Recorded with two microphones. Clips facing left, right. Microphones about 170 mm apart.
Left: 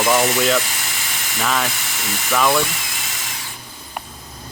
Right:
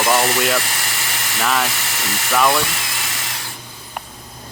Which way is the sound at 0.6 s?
65° right (ahead or behind).